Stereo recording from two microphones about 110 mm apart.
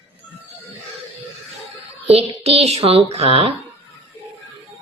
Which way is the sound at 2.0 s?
70° right (ahead or behind).